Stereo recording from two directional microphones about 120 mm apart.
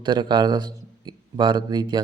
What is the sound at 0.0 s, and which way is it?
A man's voice, 40° right (ahead or behind).